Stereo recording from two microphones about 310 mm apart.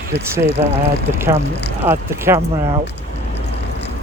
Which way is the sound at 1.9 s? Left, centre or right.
Centre.